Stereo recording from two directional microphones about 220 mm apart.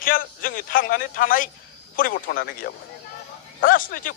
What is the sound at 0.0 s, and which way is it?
Speech, 40° left (ahead or behind).